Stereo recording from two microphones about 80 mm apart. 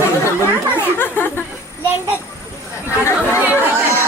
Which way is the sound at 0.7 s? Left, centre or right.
Left.